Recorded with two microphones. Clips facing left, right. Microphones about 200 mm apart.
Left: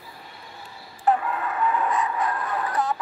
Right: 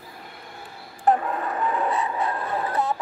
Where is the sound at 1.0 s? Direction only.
40° right (ahead or behind).